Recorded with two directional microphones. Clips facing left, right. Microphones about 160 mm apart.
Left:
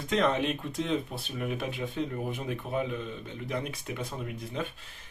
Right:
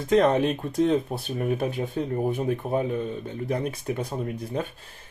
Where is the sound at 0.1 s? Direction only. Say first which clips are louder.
Right 7 dB; 40° right (ahead or behind).